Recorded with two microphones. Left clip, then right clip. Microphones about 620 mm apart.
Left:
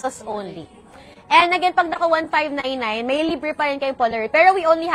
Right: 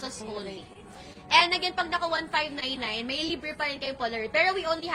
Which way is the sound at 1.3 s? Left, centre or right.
Left.